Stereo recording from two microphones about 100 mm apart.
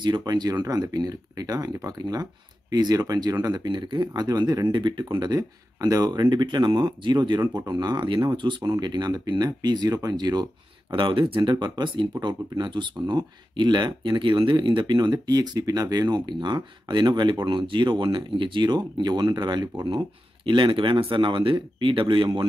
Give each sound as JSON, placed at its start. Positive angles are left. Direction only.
{"t": 0.0, "sound": "speech", "side_deg": -45}
{"t": 10.9, "sound": "speech", "side_deg": -55}
{"t": 11.5, "sound": "speech", "side_deg": -45}